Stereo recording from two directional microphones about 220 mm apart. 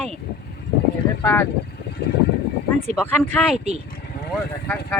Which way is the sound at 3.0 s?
5° left (ahead or behind).